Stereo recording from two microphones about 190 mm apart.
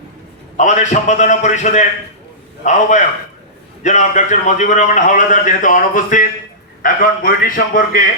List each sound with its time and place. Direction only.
0.5 s a man's voice: 40° left (ahead or behind)